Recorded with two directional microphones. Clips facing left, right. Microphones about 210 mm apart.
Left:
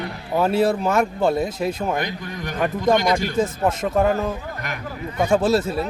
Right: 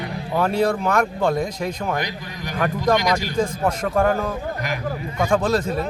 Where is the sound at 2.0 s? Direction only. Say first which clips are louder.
Left 2 dB; 50° left (ahead or behind).